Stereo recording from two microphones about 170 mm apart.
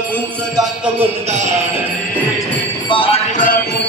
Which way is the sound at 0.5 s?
5° right (ahead or behind).